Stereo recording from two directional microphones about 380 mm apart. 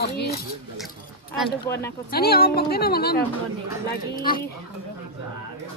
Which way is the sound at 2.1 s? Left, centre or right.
Left.